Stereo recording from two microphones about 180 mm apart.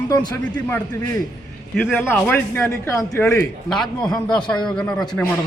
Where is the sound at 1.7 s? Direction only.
Centre (ahead or behind).